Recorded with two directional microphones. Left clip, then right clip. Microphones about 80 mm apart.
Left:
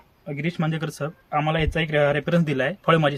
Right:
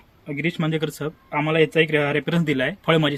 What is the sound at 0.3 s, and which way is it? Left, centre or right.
Speech, left.